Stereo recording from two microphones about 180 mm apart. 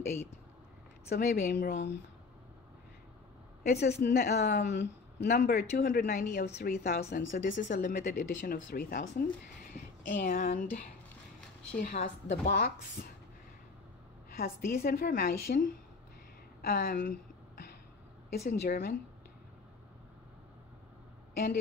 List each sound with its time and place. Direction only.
1.0 s a woman's voice: 60° left (ahead or behind)
3.8 s a woman's voice: 65° left (ahead or behind); by 12.4 s 45° left (ahead or behind)
12.4 s a woman's voice: 60° left (ahead or behind)
14.3 s a woman's voice: 55° left (ahead or behind)
16.6 s a sound: 60° left (ahead or behind)
18.3 s a woman's voice: 60° left (ahead or behind)